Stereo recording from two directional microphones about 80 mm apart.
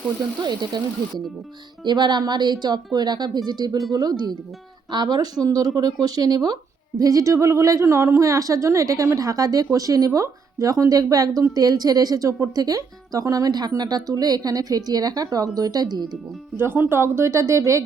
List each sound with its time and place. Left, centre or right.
0.4 s speech: right
1.8 s a woman's voice: right
16.6 s a woman's voice: right